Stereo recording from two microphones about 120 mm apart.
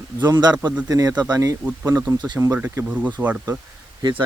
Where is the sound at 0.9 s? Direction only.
30° right (ahead or behind); by 3.5 s 15° right (ahead or behind).